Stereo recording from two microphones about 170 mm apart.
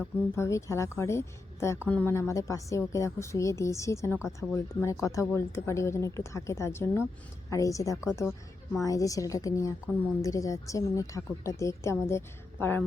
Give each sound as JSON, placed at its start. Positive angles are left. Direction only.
{"t": 0.3, "sound": "a woman's voice", "side_deg": 15}